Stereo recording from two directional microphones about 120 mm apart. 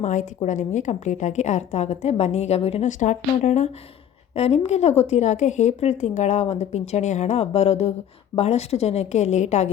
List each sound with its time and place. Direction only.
0.0 s a woman's voice: 90° left; by 3.7 s 75° left (ahead or behind)
4.4 s a woman's voice: 60° left (ahead or behind)